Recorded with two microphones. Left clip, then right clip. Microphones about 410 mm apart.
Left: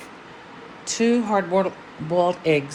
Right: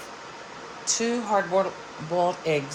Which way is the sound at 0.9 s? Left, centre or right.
Left.